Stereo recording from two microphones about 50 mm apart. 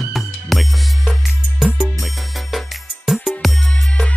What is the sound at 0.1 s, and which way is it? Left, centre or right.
Music, centre.